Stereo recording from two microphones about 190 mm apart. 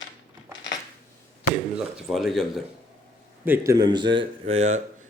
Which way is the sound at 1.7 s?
Centre (ahead or behind).